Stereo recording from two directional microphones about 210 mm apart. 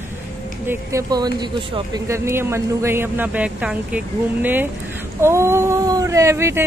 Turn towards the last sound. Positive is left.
turn(degrees=-10)  # may be behind; listen again after turning